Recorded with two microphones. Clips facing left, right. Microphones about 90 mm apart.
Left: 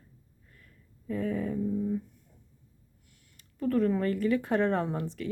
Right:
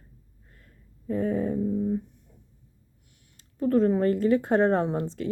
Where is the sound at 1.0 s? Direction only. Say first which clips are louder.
Right 5 dB; 35° right (ahead or behind).